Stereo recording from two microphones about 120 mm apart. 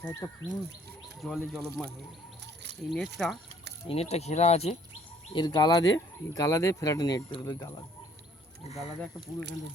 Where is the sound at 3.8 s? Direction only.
60° left (ahead or behind).